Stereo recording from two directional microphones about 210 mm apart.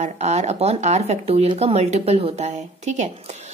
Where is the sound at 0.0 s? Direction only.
35° right (ahead or behind).